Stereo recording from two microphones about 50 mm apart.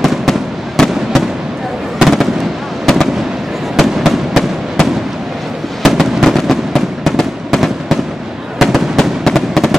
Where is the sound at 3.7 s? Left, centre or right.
Centre.